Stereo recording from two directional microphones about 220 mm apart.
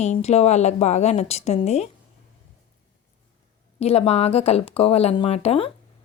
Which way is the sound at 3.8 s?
30° left (ahead or behind).